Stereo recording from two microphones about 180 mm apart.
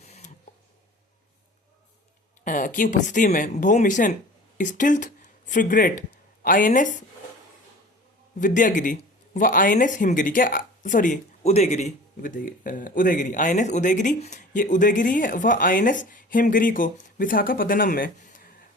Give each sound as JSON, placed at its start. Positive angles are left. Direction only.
{"t": 0.0, "sound": "a sound", "side_deg": 40}
{"t": 2.4, "sound": "speech", "side_deg": 45}
{"t": 8.4, "sound": "speech", "side_deg": 45}